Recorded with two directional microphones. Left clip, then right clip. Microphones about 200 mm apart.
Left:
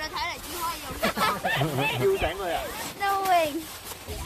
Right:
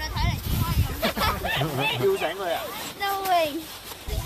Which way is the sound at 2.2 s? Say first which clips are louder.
Right 1 dB; 50° right (ahead or behind).